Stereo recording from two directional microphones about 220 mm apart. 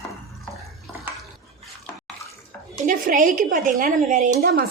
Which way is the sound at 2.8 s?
35° right (ahead or behind).